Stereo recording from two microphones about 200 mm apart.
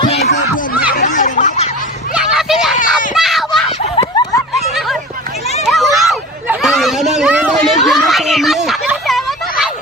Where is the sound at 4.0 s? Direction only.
25° left (ahead or behind).